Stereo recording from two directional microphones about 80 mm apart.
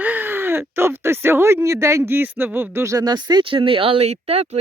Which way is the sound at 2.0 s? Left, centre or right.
Right.